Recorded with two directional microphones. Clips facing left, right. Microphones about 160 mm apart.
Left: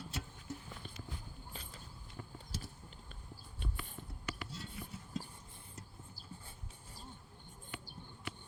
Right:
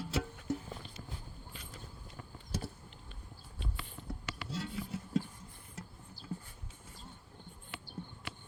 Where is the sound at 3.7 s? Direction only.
85° right.